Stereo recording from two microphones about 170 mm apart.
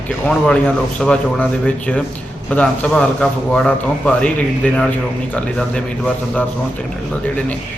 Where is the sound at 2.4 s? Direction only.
5° left (ahead or behind).